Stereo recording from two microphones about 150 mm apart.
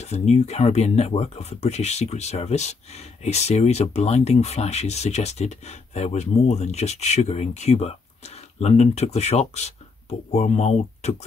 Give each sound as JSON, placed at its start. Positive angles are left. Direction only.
{"t": 0.0, "sound": "speech", "side_deg": 50}